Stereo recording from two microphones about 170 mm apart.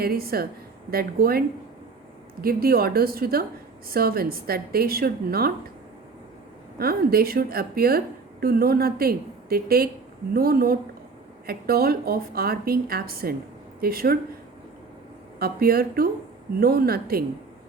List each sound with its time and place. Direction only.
0.0 s a woman's voice: 65° right (ahead or behind)
6.7 s a woman's voice: 65° right (ahead or behind)
15.4 s a woman's voice: 65° right (ahead or behind)